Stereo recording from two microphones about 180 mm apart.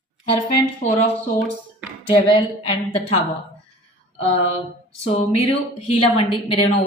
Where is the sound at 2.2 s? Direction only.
30° left (ahead or behind).